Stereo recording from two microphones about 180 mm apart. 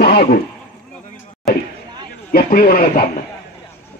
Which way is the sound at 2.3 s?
55° left (ahead or behind).